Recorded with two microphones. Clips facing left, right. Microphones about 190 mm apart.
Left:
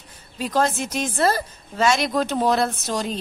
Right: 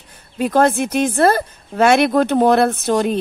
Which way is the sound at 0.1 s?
60° right (ahead or behind).